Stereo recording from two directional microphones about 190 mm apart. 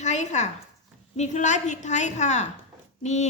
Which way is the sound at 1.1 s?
35° left (ahead or behind).